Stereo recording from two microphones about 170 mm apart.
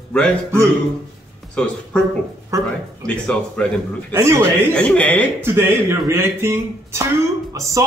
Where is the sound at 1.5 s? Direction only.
5° left (ahead or behind).